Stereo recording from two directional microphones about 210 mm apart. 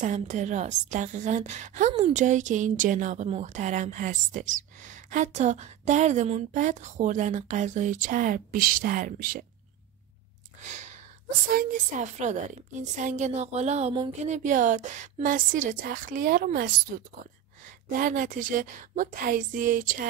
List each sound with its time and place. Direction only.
0.0 s a woman's voice: 35° right (ahead or behind)
10.6 s a sound: 35° right (ahead or behind)
11.5 s a woman's voice: 35° right (ahead or behind)